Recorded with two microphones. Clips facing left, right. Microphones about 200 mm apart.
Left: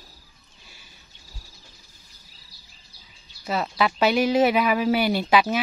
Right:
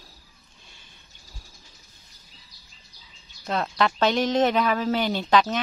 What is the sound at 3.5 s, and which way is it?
A woman's voice, 5° left (ahead or behind).